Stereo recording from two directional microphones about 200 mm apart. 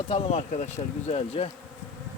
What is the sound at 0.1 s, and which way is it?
Speech, 30° left (ahead or behind).